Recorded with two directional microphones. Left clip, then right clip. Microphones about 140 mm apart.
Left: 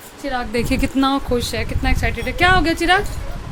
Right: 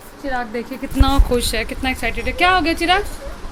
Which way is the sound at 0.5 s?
90° left.